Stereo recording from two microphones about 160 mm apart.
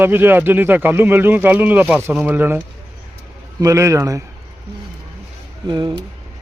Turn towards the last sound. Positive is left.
turn(degrees=-30)  # may be behind; listen again after turning